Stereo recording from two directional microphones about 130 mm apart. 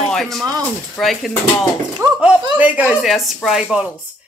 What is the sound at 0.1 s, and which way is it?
Speech, centre (ahead or behind).